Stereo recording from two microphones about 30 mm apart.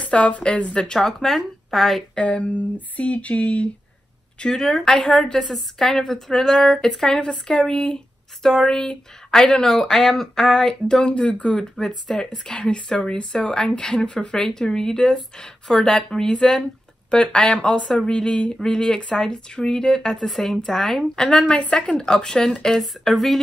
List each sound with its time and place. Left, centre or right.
0.0 s a sound: left
0.9 s speech: centre
2.1 s a sound: left
2.4 s a sound: left
4.5 s a woman's voice: centre
11.1 s a sound: left
11.8 s speech: left
14.3 s speech: left
20.2 s a woman's voice: centre
21.5 s speech: left
21.9 s speech: left
22.8 s a woman's voice: centre